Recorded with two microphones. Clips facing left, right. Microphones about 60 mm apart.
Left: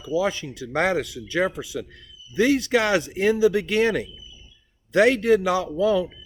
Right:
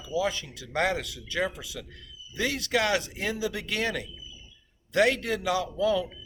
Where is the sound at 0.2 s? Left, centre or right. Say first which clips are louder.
Left 3 dB; left.